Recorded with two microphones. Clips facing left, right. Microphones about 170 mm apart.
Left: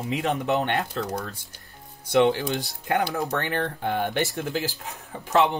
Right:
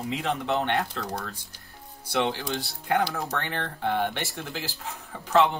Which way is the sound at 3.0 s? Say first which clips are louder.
Left 4 dB; 15° left (ahead or behind).